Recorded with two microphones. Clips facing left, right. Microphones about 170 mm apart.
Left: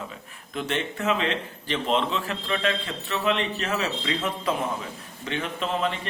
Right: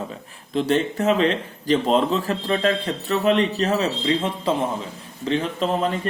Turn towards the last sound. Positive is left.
turn(degrees=-35)  # may be behind; listen again after turning